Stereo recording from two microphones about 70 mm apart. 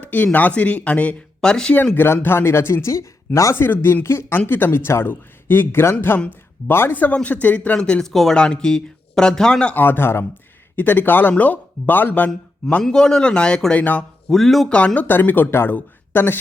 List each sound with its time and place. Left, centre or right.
0.0 s a sound: left
0.3 s speech: left
2.2 s speech: left
3.5 s speech: left
6.9 s speech: left
9.7 s speech: left
12.8 s speech: centre
14.7 s speech: centre